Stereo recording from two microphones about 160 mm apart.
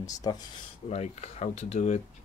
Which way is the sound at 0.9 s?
45° left (ahead or behind).